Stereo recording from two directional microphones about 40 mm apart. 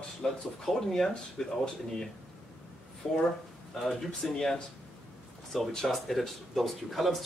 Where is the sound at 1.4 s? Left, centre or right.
Centre.